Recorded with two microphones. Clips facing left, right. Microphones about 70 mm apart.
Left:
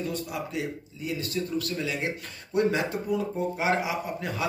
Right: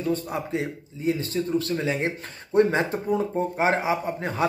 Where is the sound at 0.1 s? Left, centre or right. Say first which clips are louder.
Right 5 dB; right.